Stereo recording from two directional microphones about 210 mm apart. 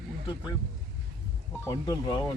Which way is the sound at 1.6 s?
15° left (ahead or behind).